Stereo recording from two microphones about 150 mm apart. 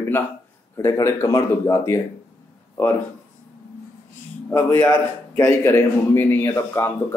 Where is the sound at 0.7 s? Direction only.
20° left (ahead or behind).